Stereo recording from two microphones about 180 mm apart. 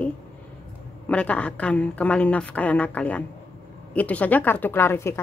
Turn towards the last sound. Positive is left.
turn(degrees=15)  # may be behind; listen again after turning